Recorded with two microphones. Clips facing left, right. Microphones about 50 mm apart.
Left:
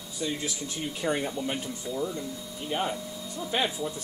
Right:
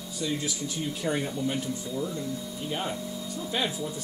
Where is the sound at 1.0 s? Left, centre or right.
Centre.